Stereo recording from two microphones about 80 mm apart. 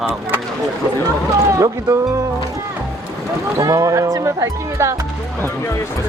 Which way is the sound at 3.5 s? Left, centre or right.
Right.